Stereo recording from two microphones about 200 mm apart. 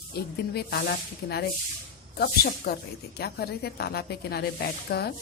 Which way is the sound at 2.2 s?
50° left (ahead or behind).